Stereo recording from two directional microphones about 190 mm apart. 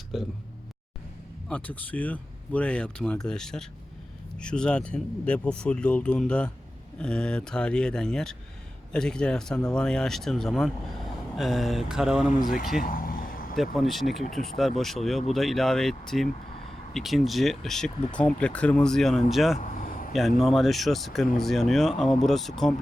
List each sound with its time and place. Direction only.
0.1 s speech: centre (ahead or behind)
1.5 s speech: 10° left (ahead or behind)
12.8 s vehicle: 50° left (ahead or behind)
13.7 s speech: centre (ahead or behind)
19.5 s vehicle: 45° left (ahead or behind)
20.1 s speech: centre (ahead or behind)